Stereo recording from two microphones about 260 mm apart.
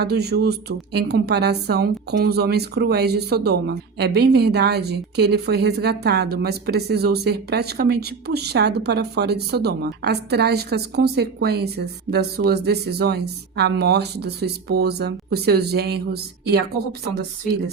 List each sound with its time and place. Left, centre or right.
0.0 s speech: right